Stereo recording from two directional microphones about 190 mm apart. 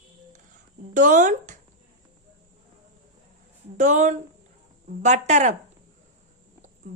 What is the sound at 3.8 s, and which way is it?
Speech, 40° right (ahead or behind).